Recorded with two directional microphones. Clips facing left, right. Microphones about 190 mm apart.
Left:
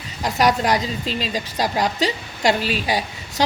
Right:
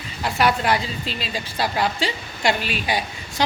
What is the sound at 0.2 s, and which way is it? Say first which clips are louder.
A woman's voice: left 2 dB; 40° left (ahead or behind).